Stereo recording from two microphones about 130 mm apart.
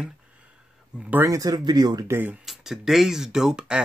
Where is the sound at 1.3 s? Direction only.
30° right (ahead or behind).